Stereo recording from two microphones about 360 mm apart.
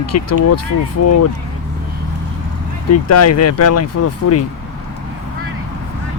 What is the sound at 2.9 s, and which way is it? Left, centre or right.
Speech, left.